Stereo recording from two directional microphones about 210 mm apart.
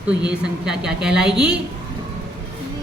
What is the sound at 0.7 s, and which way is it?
Speech, 5° right (ahead or behind).